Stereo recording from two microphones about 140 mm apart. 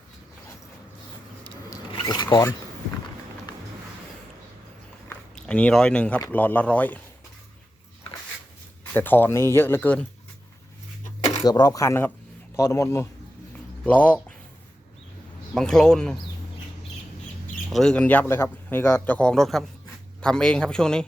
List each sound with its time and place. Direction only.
1.9 s filing: 30° left (ahead or behind)
5.0 s a sound: 10° left (ahead or behind)
6.3 s speech: 10° left (ahead or behind)
8.9 s speech: 15° left (ahead or behind)
11.4 s speech: 30° left (ahead or behind); by 14.3 s 10° left (ahead or behind)
15.5 s speech: 5° left (ahead or behind)
17.7 s speech: 5° left (ahead or behind)